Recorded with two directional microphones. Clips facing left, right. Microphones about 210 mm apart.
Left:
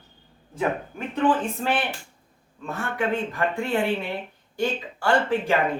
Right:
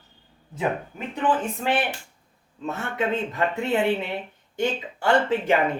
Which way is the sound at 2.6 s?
20° right (ahead or behind).